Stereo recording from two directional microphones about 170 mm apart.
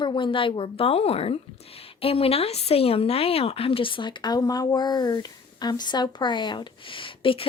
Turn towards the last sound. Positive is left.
turn(degrees=30)  # may be behind; listen again after turning